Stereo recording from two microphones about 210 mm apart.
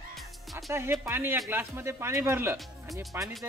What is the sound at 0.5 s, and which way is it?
Speech, 10° right (ahead or behind).